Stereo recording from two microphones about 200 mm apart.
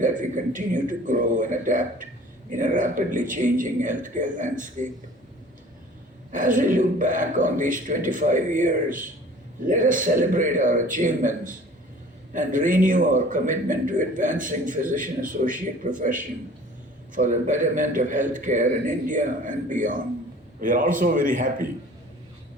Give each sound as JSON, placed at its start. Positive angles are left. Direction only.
{"t": 0.0, "sound": "a man's voice", "side_deg": -40}
{"t": 6.3, "sound": "a man's voice", "side_deg": -40}